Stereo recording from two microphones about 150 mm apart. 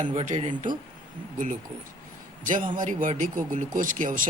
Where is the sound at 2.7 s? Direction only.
60° right (ahead or behind).